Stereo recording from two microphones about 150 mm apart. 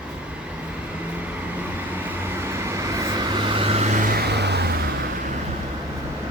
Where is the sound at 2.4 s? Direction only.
15° right (ahead or behind); by 4.1 s 50° right (ahead or behind).